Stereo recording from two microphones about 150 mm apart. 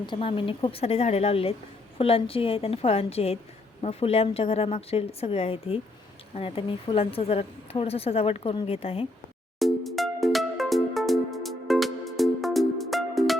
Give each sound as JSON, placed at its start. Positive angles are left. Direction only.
{"t": 0.0, "sound": "a woman's voice", "side_deg": 35}
{"t": 9.6, "sound": "music", "side_deg": 0}